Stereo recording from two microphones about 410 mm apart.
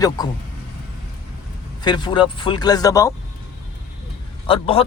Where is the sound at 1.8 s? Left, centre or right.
Centre.